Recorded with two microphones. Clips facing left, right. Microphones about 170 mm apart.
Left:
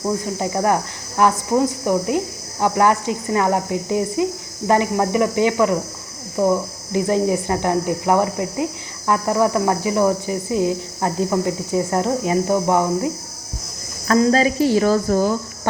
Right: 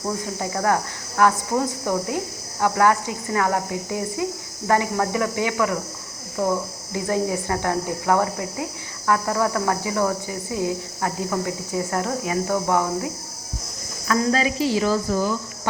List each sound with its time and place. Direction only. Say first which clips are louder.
0.3 s speech: left 1 dB; 20° left (ahead or behind)
6.9 s speech: left 5 dB; 20° left (ahead or behind)
14.1 s speech: left 5 dB; 40° left (ahead or behind)